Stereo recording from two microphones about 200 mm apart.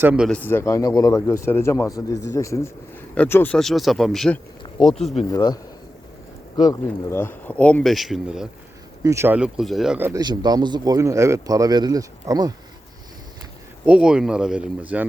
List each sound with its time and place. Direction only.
0.0 s speech: 5° right (ahead or behind)
0.3 s a man's voice: 10° left (ahead or behind)
5.3 s speech: 20° left (ahead or behind)
6.8 s a man's voice: 10° left (ahead or behind)
9.0 s speech: 10° right (ahead or behind)
10.1 s speech: 20° right (ahead or behind)
13.8 s speech: 5° right (ahead or behind)